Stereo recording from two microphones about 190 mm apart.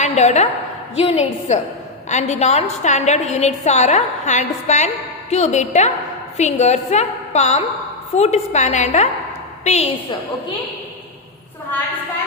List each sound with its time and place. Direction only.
0.0 s a woman's voice: 35° left (ahead or behind)